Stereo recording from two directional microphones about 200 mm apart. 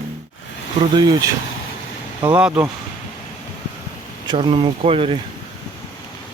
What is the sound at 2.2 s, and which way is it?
Speech, 5° right (ahead or behind).